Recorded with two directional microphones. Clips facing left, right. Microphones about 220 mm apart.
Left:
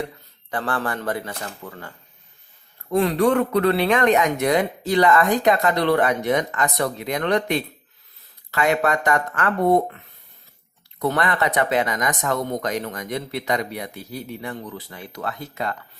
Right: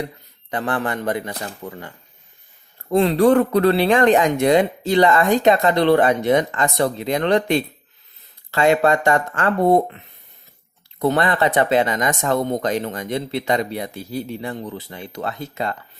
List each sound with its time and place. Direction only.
0.5 s speech: 20° right (ahead or behind)
2.9 s speech: 30° right (ahead or behind)
11.0 s speech: 30° right (ahead or behind)